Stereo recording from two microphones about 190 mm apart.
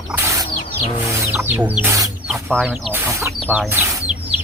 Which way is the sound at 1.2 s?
10° right (ahead or behind).